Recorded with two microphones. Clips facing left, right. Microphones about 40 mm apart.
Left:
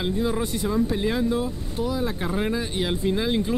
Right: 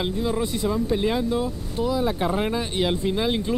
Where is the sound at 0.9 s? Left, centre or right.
Centre.